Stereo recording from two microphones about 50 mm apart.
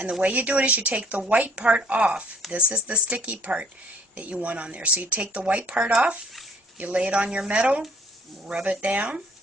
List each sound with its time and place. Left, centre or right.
0.0 s speech: right